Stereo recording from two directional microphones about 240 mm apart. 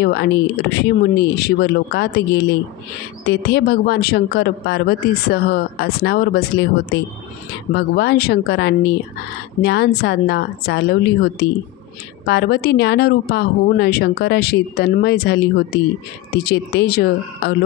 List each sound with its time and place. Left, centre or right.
0.0 s speech: left